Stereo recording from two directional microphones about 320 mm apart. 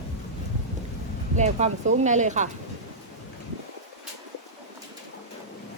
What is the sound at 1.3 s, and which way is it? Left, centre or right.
A woman's voice, right.